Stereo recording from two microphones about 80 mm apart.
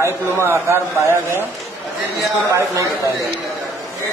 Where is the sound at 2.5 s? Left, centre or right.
Right.